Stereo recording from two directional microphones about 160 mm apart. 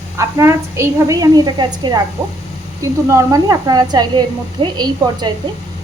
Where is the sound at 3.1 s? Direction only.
20° right (ahead or behind).